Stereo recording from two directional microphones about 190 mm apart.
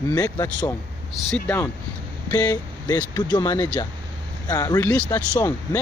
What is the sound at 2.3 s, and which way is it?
Speech, 20° left (ahead or behind).